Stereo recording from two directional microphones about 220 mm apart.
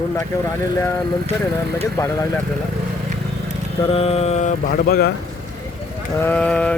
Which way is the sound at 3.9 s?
30° left (ahead or behind).